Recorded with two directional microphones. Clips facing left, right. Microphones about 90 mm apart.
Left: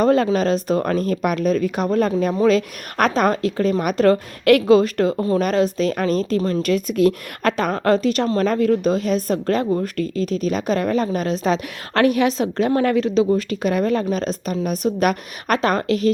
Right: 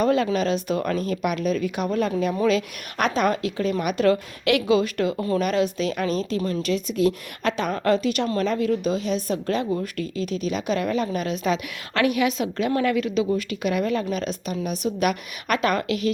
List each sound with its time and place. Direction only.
0.0 s a woman's voice: 40° left (ahead or behind)
5.1 s speech: 30° left (ahead or behind)
5.4 s a woman's voice: 40° left (ahead or behind)